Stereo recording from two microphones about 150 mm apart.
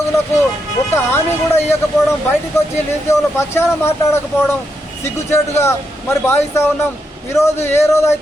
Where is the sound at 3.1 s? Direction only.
15° left (ahead or behind).